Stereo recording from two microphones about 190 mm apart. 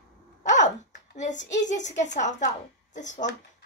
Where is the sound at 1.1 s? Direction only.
40° left (ahead or behind).